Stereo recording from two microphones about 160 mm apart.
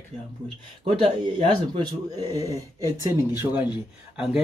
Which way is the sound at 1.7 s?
25° right (ahead or behind).